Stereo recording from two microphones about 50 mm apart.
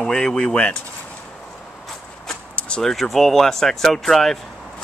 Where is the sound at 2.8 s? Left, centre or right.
Centre.